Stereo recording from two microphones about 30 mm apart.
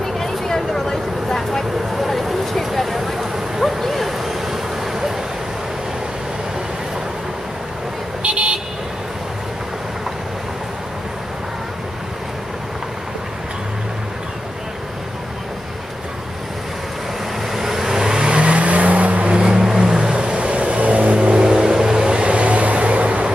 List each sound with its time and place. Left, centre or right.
0.2 s vehicle: centre
2.0 s a sound: centre
3.2 s a sound: centre
3.8 s a sound: centre
8.2 s vehicle: right
17.6 s vehicle: centre
18.4 s vehicle: right
19.5 s vehicle: centre
20.2 s vehicle: right
21.2 s vehicle: right
22.1 s vehicle: right